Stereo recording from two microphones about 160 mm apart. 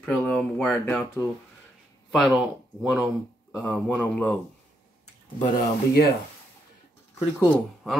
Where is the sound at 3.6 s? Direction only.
10° left (ahead or behind).